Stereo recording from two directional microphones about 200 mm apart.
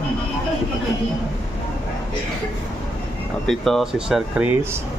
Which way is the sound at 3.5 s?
Centre (ahead or behind).